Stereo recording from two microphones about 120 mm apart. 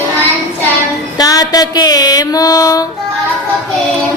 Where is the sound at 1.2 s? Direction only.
30° left (ahead or behind).